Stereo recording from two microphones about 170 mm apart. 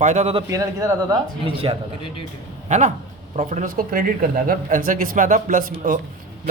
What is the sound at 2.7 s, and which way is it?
Speech, 50° right (ahead or behind).